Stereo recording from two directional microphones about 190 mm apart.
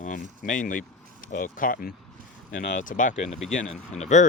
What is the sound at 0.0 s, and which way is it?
Speech, 40° left (ahead or behind).